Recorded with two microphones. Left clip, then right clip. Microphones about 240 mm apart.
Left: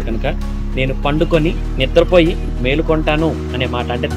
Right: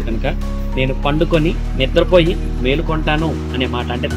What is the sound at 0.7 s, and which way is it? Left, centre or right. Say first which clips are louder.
Speech: even; left.